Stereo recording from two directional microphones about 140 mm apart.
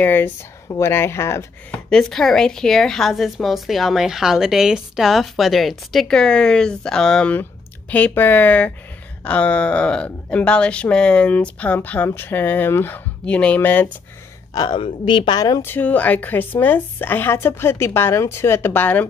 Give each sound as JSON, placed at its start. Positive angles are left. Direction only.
{"t": 0.0, "sound": "speech", "side_deg": 15}
{"t": 1.7, "sound": "speech", "side_deg": 5}
{"t": 14.5, "sound": "a man's voice", "side_deg": 30}
{"t": 15.6, "sound": "speech", "side_deg": 15}